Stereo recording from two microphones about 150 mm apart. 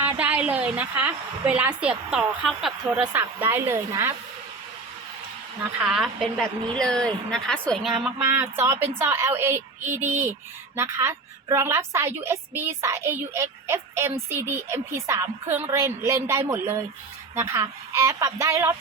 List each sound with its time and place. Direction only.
0.0 s a woman's voice: 10° right (ahead or behind)
5.8 s a woman's voice: 5° right (ahead or behind)
8.0 s a woman's voice: 15° right (ahead or behind)